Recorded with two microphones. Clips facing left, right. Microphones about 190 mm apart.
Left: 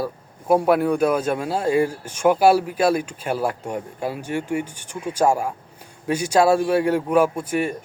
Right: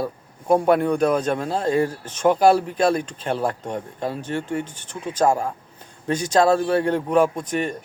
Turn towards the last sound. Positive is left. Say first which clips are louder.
# even
turn(degrees=10)  # may be behind; listen again after turning